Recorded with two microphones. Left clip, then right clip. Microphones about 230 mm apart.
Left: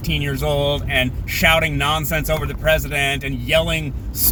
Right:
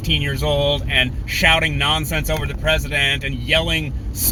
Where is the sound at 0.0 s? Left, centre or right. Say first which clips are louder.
Right 2 dB; centre.